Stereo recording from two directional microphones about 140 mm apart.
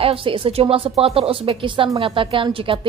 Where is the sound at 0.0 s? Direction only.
40° right (ahead or behind).